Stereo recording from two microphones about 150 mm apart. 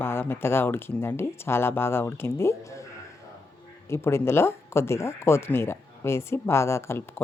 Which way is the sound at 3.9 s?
15° left (ahead or behind).